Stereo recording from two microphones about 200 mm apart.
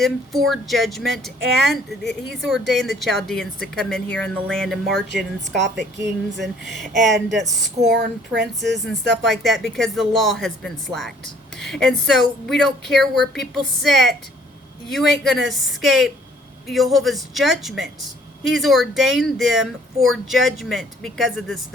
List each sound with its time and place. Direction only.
0.0 s speech: centre (ahead or behind)
5.1 s a woman's voice: 60° right (ahead or behind)
6.7 s speech: centre (ahead or behind)
8.4 s a woman's voice: 60° right (ahead or behind)
8.9 s speech: centre (ahead or behind)